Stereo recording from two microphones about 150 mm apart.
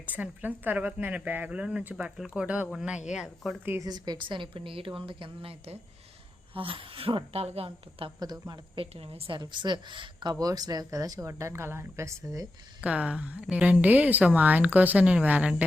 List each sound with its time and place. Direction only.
0.0 s a woman's voice: 10° right (ahead or behind)
3.7 s a woman's voice: 25° right (ahead or behind); by 8.1 s 40° right (ahead or behind)
8.2 s a woman's voice: 30° right (ahead or behind)
12.8 s a woman's voice: 5° right (ahead or behind)